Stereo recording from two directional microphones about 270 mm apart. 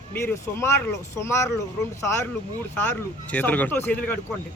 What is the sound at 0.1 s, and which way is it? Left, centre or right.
Speech, centre.